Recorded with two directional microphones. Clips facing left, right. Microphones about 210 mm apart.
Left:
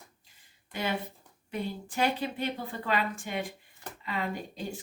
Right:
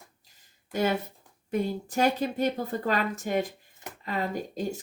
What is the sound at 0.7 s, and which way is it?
Speech, 45° right (ahead or behind).